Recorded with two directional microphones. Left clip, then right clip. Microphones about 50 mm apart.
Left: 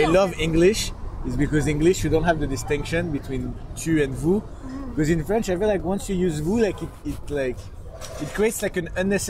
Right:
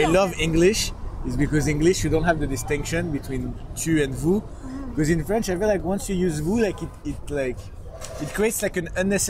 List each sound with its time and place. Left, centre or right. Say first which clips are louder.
0.0 s speech: left 1 dB; right